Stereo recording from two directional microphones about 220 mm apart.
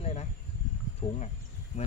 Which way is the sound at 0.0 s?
30° left (ahead or behind).